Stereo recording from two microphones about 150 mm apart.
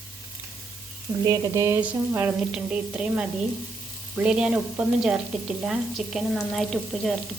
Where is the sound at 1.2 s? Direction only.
25° right (ahead or behind).